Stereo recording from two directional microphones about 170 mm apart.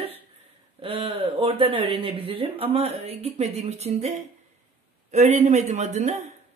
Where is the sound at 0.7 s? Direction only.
35° right (ahead or behind).